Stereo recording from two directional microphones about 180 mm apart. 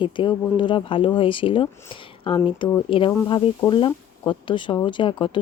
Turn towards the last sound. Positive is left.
turn(degrees=25)  # may be behind; listen again after turning